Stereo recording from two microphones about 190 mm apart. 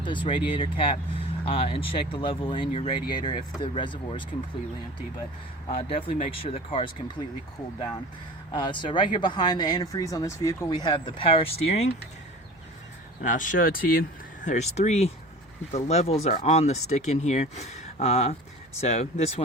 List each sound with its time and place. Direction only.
0.0 s speech: 25° left (ahead or behind)
5.9 s speech: 30° left (ahead or behind)
8.5 s speech: 25° left (ahead or behind)
13.2 s speech: 45° left (ahead or behind)
14.4 s speech: 35° left (ahead or behind)